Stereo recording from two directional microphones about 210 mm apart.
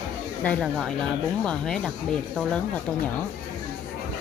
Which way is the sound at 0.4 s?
5° left (ahead or behind).